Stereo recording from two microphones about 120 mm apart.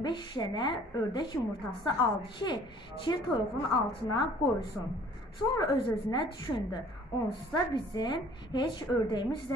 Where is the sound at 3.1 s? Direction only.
35° left (ahead or behind).